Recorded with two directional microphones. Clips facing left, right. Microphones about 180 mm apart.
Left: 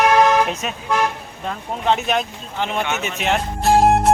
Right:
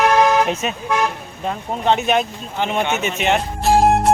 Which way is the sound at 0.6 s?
Centre (ahead or behind).